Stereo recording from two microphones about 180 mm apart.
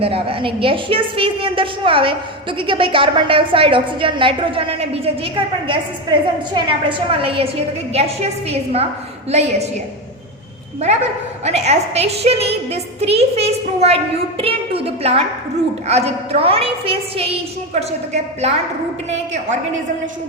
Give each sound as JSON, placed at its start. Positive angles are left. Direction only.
{"t": 0.0, "sound": "a woman's voice", "side_deg": -30}
{"t": 11.4, "sound": "a woman's voice", "side_deg": -40}